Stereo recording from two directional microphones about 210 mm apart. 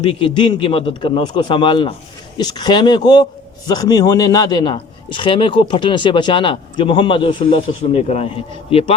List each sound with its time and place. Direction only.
0.1 s a man's voice: 25° left (ahead or behind)